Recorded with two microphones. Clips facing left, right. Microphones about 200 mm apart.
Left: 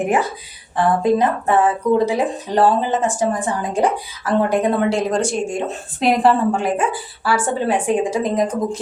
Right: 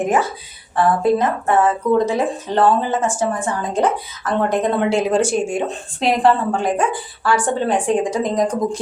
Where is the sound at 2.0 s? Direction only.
15° left (ahead or behind).